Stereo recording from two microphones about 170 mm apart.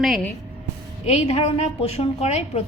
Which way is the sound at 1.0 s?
40° left (ahead or behind).